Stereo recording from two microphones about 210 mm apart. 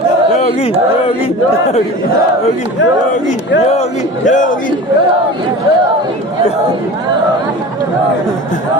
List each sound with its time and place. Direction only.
4.3 s speech: 40° left (ahead or behind)